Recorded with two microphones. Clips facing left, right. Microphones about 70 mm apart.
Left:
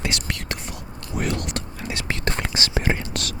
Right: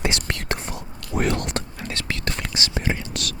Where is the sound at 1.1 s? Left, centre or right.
Right.